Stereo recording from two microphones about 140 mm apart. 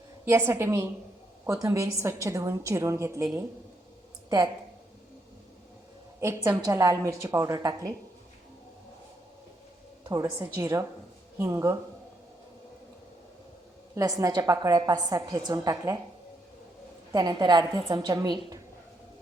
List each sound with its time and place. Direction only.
0.3 s a woman's voice: 20° right (ahead or behind)
6.1 s a woman's voice: 20° right (ahead or behind)
10.0 s a woman's voice: 25° right (ahead or behind)
10.3 s a woman's voice: 15° right (ahead or behind)
10.6 s a woman's voice: 25° right (ahead or behind)
13.9 s a woman's voice: 25° right (ahead or behind)
17.1 s a woman's voice: 30° right (ahead or behind)